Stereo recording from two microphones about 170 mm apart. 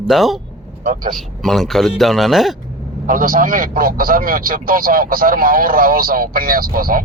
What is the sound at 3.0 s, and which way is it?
Speech, 50° right (ahead or behind).